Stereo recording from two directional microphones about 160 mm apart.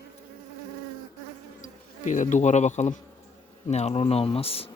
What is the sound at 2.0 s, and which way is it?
Insect, 50° left (ahead or behind).